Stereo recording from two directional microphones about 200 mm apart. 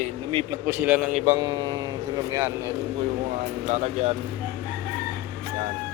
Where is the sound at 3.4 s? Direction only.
35° right (ahead or behind).